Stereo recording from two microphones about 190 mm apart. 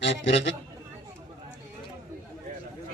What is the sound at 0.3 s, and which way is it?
Speech, 70° left (ahead or behind).